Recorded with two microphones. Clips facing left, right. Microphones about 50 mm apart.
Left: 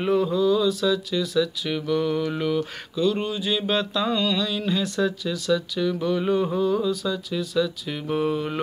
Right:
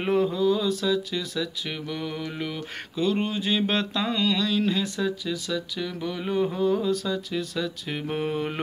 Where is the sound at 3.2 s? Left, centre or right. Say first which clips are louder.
Even; right.